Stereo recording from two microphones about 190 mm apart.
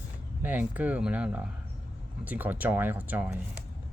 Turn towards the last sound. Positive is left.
turn(degrees=-10)  # may be behind; listen again after turning